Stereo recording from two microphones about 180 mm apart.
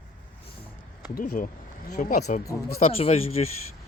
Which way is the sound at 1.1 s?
45° left (ahead or behind).